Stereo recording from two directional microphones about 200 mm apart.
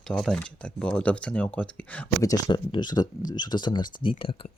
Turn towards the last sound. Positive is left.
turn(degrees=25)  # may be behind; listen again after turning